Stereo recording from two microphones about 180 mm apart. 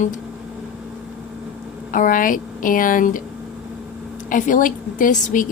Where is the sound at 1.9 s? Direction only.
50° left (ahead or behind).